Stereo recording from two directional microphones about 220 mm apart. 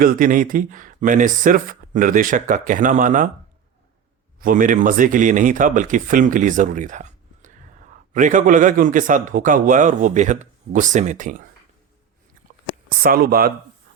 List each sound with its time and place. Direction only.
0.0 s a man's voice: 40° right (ahead or behind)
4.4 s a man's voice: 40° right (ahead or behind)
13.0 s speech: 45° right (ahead or behind)